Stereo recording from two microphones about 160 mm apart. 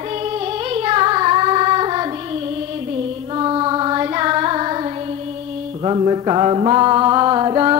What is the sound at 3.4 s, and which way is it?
Female singing, 30° right (ahead or behind).